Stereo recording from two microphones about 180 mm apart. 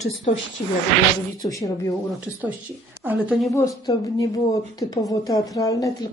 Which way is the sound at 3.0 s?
10° right (ahead or behind).